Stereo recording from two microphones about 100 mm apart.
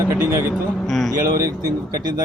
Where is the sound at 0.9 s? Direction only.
5° left (ahead or behind).